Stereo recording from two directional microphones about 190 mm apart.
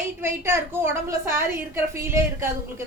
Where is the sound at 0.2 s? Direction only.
15° right (ahead or behind).